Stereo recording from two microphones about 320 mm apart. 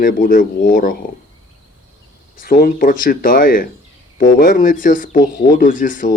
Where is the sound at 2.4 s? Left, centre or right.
Left.